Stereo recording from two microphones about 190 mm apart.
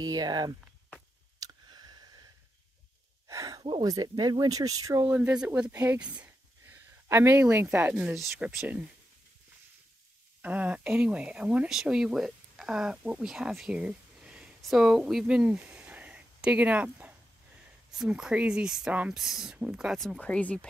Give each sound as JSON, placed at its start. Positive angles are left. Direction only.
{"t": 0.0, "sound": "speech", "side_deg": -20}
{"t": 1.4, "sound": "a sound", "side_deg": -20}
{"t": 3.3, "sound": "speech", "side_deg": -20}
{"t": 10.4, "sound": "speech", "side_deg": -10}